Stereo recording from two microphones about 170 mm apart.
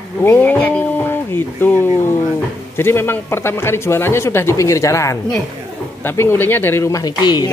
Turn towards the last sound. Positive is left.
turn(degrees=25)  # may be behind; listen again after turning